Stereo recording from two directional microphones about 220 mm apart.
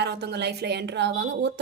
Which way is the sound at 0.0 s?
50° right (ahead or behind).